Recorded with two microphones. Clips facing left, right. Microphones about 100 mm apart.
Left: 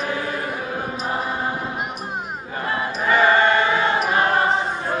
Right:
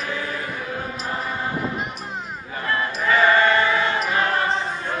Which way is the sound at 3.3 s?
25° left (ahead or behind).